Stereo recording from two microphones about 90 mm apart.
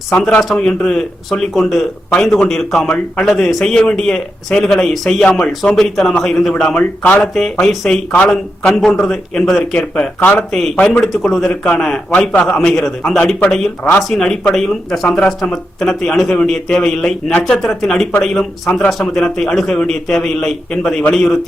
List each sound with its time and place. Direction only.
0.2 s a man's voice: 10° left (ahead or behind)
10.2 s speech: 20° left (ahead or behind)
10.5 s a man's voice: centre (ahead or behind)
10.8 s a man's voice: 15° left (ahead or behind)
11.1 s a man's voice: centre (ahead or behind)